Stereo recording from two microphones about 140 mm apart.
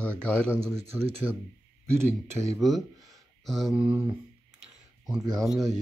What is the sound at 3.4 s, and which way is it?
Speech, centre (ahead or behind).